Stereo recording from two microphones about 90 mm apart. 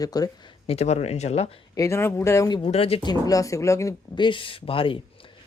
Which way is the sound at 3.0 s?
45° left (ahead or behind).